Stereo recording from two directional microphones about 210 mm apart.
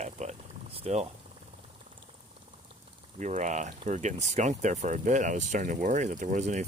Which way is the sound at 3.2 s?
35° right (ahead or behind).